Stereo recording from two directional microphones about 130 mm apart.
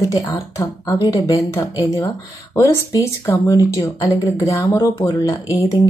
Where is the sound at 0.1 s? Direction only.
25° left (ahead or behind).